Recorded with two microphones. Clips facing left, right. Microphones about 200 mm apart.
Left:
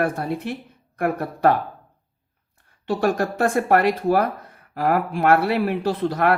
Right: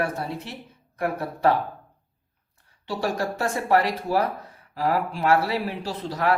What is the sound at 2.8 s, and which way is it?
Speech, 55° left (ahead or behind).